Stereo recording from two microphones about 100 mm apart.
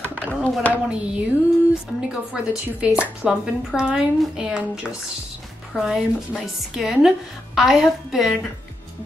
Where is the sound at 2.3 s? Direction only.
10° right (ahead or behind).